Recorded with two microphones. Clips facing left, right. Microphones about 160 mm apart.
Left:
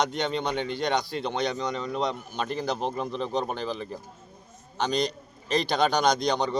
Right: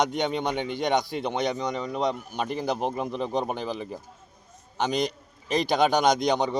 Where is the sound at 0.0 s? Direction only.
15° right (ahead or behind).